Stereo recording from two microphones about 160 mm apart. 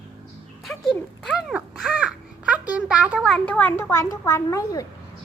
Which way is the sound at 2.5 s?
10° right (ahead or behind).